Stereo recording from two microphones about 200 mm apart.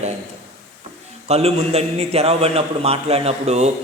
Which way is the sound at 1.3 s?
30° right (ahead or behind).